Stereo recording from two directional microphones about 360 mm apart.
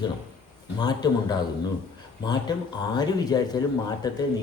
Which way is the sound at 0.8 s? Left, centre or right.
Centre.